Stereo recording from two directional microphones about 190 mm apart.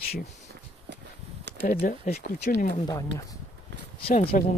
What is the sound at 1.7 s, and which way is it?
Speech, 50° left (ahead or behind).